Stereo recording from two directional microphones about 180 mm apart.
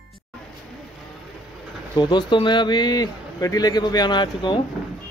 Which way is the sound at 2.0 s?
25° left (ahead or behind).